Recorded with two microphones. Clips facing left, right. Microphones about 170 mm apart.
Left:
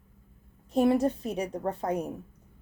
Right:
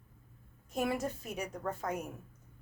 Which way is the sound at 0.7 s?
30° left (ahead or behind).